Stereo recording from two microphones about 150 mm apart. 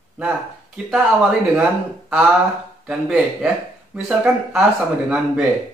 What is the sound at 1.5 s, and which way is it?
Speech, 10° right (ahead or behind).